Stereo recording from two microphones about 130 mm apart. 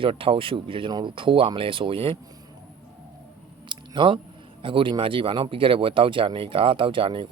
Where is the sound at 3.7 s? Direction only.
40° right (ahead or behind).